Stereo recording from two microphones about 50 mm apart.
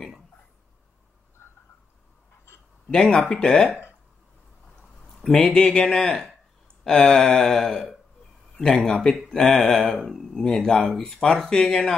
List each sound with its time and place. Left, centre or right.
2.9 s speech: centre
5.0 s a sound: centre
5.3 s speech: centre